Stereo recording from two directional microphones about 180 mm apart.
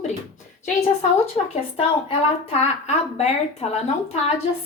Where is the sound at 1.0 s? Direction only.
35° left (ahead or behind).